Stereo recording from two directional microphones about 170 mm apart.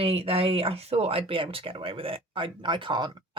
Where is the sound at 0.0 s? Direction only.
35° right (ahead or behind).